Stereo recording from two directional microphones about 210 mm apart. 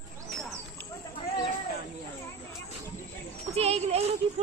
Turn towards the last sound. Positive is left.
turn(degrees=-30)  # may be behind; listen again after turning